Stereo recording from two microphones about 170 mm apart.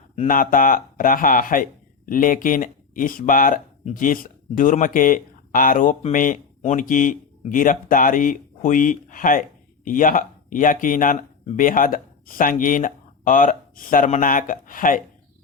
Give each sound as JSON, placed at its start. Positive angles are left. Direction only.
{"t": 0.3, "sound": "speech", "side_deg": 55}